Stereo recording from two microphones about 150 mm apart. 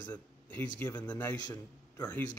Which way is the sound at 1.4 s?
25° left (ahead or behind).